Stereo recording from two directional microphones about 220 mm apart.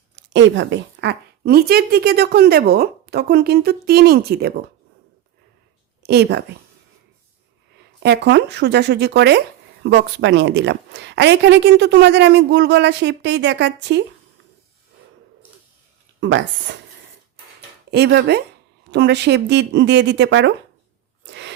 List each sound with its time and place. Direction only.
0.3 s speech: 55° right (ahead or behind)
6.0 s speech: 50° right (ahead or behind)
8.0 s speech: 50° right (ahead or behind)
16.2 s speech: 55° right (ahead or behind)
17.9 s speech: 50° right (ahead or behind)
21.2 s a sound: 50° right (ahead or behind)